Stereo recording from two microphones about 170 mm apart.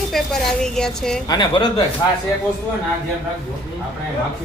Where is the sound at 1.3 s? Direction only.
25° left (ahead or behind).